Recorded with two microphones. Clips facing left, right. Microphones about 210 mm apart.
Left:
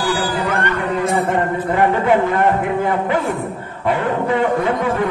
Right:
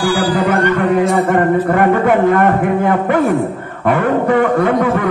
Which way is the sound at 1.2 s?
55° right (ahead or behind).